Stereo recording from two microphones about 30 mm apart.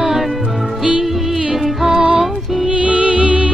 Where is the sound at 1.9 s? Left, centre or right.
Right.